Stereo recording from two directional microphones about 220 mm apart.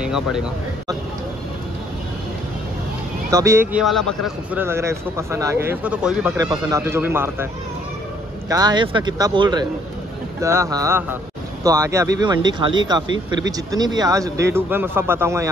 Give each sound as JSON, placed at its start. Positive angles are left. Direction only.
{"t": 0.0, "sound": "speech", "side_deg": -5}
{"t": 3.3, "sound": "speech", "side_deg": -15}
{"t": 3.8, "sound": "speech", "side_deg": 0}
{"t": 8.5, "sound": "speech", "side_deg": -15}